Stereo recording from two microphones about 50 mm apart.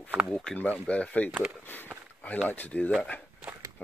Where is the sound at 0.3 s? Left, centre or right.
Centre.